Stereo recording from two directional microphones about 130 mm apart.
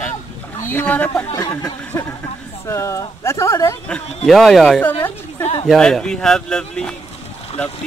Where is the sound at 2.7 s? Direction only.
20° left (ahead or behind).